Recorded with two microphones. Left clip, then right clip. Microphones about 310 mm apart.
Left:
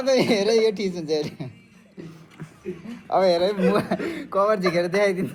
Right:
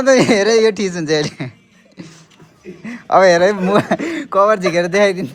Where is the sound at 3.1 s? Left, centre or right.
Right.